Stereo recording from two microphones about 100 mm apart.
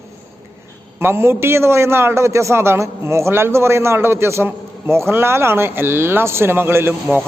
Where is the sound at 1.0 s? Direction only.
25° right (ahead or behind).